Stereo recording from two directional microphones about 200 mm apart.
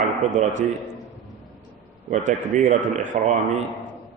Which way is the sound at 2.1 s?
35° right (ahead or behind).